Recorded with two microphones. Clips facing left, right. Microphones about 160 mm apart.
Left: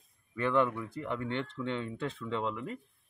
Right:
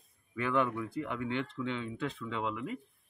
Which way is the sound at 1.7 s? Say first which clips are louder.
Left 1 dB; 5° right (ahead or behind).